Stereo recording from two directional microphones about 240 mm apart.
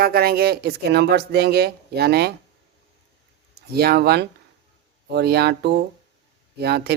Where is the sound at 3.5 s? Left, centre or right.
Right.